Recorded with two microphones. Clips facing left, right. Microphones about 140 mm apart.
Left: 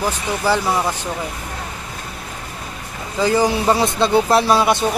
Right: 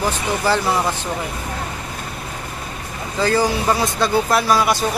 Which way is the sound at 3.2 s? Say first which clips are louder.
Left 2 dB; 20° left (ahead or behind).